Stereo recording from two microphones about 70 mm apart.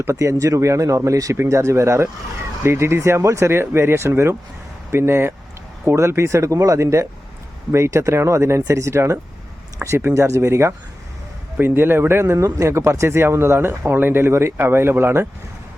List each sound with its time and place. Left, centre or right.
0.0 s speech: right
10.0 s speech: right
10.2 s speech: right